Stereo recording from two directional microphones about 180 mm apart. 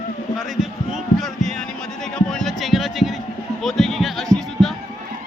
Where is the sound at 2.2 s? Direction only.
5° left (ahead or behind).